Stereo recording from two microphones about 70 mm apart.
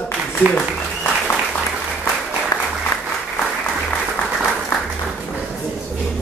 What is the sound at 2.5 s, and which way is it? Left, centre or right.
Applause, left.